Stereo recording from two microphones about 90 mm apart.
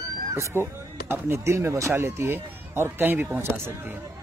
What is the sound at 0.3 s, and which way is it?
Speech, 30° right (ahead or behind).